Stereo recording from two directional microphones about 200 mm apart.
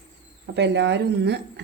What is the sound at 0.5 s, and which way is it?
Speech, 60° right (ahead or behind).